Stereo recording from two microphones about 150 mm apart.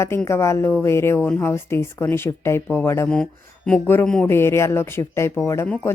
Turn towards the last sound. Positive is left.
turn(degrees=10)  # may be behind; listen again after turning